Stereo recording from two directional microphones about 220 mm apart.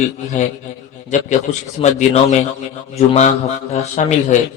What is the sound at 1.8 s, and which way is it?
A man's voice, 30° left (ahead or behind).